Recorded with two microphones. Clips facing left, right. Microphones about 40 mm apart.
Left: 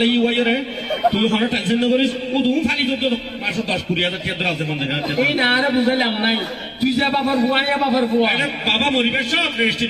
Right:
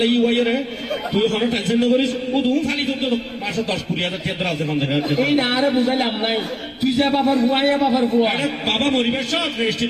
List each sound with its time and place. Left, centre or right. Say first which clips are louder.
0.0 s a man's voice: even; centre
0.3 s a man's voice: left 1 dB; left
1.0 s a man's voice: left 2 dB; centre
4.0 s a man's voice: left 2 dB; centre
9.0 s a man's voice: left 2 dB; left